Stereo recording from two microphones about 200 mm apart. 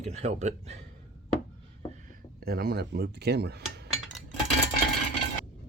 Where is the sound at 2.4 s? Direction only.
50° right (ahead or behind).